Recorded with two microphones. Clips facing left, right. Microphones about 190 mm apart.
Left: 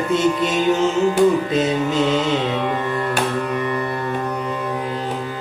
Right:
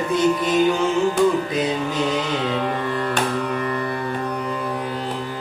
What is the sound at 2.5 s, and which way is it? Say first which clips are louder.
Music: left 1 dB; 5° left (ahead or behind).